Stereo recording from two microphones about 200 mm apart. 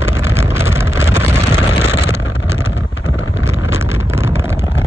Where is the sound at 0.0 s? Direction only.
10° right (ahead or behind).